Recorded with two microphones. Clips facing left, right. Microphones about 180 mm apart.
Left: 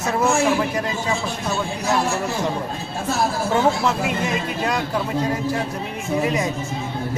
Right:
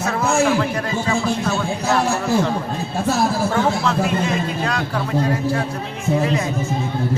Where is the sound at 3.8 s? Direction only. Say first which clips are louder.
Right 2 dB; 20° left (ahead or behind).